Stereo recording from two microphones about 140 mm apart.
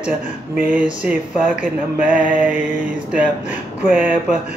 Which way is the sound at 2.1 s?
75° right (ahead or behind).